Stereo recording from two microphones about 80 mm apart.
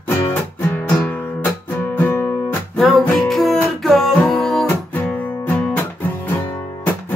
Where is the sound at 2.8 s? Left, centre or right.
Centre.